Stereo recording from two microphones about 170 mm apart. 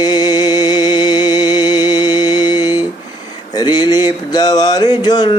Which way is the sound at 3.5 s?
25° left (ahead or behind).